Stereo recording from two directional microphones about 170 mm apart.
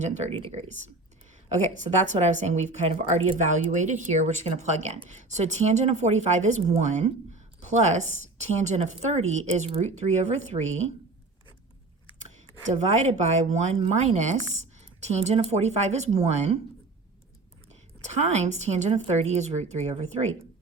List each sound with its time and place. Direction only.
1.5 s speech: 45° right (ahead or behind)
12.9 s a woman's voice: 40° right (ahead or behind)
17.7 s a woman's voice: 40° right (ahead or behind)